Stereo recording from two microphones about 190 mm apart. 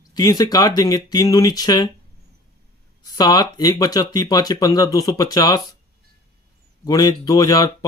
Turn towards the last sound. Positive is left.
turn(degrees=20)  # may be behind; listen again after turning